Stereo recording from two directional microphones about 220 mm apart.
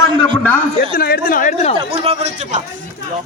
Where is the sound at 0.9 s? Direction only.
45° left (ahead or behind).